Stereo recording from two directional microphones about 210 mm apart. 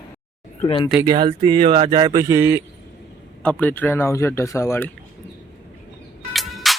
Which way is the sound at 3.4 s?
5° left (ahead or behind).